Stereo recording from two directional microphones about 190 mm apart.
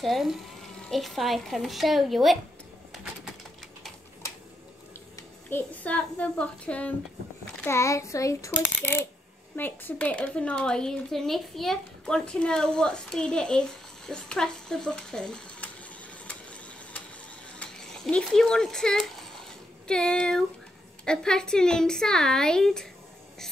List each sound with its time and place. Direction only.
0.0 s a woman's voice: centre (ahead or behind)
2.9 s bird: 5° right (ahead or behind)
5.5 s a child's voice: 5° left (ahead or behind)
17.6 s a woman's voice: 5° left (ahead or behind)